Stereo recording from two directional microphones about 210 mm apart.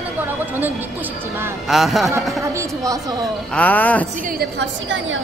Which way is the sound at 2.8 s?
15° right (ahead or behind).